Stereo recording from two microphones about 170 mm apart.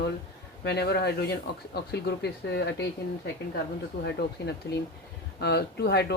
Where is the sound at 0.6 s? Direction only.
75° left (ahead or behind).